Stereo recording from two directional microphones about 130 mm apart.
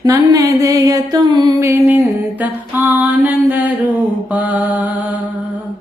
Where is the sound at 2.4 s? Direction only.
15° right (ahead or behind).